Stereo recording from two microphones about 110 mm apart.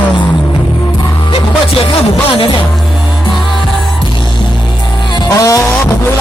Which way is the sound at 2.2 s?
55° left (ahead or behind).